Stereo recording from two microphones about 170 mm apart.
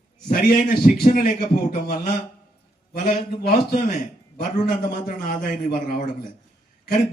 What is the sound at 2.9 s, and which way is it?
Speech, 45° left (ahead or behind).